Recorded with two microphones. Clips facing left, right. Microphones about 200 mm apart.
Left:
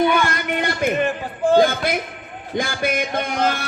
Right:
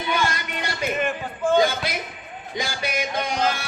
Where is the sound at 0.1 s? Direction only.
55° left (ahead or behind).